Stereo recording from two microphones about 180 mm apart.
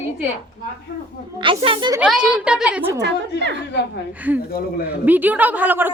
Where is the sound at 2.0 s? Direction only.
5° right (ahead or behind).